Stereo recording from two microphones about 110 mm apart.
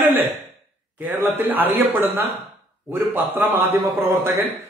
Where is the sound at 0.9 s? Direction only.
15° right (ahead or behind).